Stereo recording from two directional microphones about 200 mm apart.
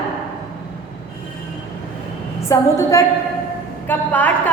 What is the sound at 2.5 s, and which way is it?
A woman's voice, 15° left (ahead or behind).